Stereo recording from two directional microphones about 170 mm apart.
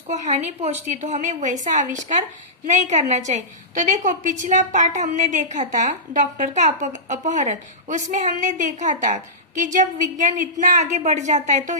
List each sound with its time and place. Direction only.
0.1 s a woman's voice: 40° right (ahead or behind)